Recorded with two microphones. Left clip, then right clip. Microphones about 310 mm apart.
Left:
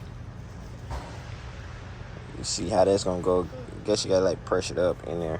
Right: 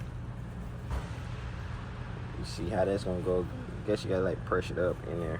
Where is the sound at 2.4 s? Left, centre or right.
Left.